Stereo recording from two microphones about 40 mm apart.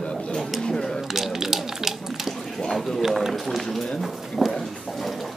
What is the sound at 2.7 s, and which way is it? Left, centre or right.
Speech, centre.